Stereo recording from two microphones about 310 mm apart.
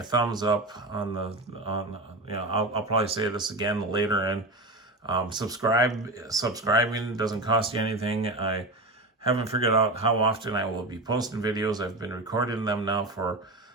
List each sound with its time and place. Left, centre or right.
0.0 s speech: centre
2.3 s speech: centre